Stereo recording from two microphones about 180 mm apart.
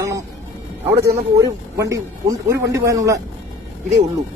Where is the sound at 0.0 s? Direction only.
15° right (ahead or behind).